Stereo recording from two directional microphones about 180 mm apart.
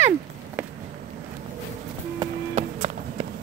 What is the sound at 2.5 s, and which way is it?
Walk, 40° right (ahead or behind).